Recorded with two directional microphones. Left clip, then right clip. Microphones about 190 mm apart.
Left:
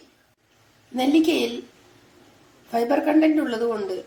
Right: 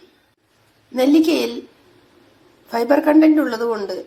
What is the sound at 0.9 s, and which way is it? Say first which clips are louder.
Speech: right 5 dB; 15° right (ahead or behind).